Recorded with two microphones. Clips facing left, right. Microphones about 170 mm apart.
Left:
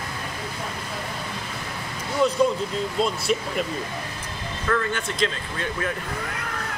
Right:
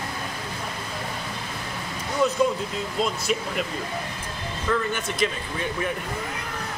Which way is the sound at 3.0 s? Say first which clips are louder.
Left 1 dB; centre (ahead or behind).